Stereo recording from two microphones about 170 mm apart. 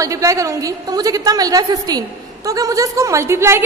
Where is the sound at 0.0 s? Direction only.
20° right (ahead or behind).